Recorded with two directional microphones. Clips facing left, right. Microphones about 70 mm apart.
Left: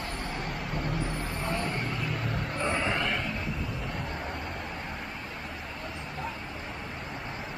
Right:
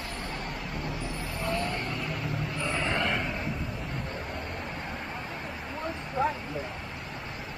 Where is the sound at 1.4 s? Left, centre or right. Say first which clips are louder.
Right 2 dB; left.